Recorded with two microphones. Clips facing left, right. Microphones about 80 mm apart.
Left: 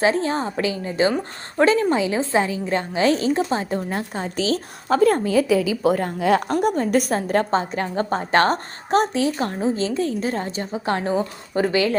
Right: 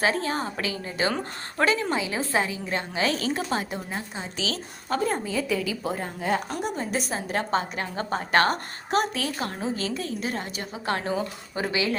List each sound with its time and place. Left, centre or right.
0.0 s a woman's voice: left
3.8 s a woman's voice: left
5.0 s a woman's voice: left
6.6 s a woman's voice: left
7.5 s a woman's voice: left
11.5 s a woman's voice: left